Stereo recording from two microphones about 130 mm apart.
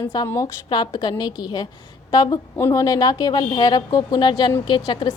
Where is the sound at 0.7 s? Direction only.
35° left (ahead or behind).